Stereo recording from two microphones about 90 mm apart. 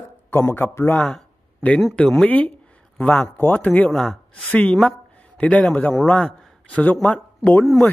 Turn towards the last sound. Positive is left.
turn(degrees=15)  # may be behind; listen again after turning